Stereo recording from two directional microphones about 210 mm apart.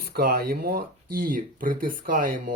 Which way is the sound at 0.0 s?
45° right (ahead or behind).